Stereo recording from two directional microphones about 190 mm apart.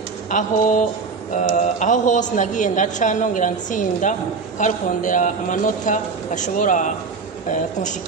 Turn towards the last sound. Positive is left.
turn(degrees=40)  # may be behind; listen again after turning